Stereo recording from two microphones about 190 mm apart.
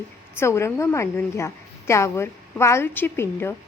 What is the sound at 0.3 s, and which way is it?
A woman's voice, 15° left (ahead or behind).